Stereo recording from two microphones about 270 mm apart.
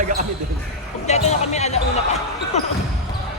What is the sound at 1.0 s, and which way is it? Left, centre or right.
Speech, left.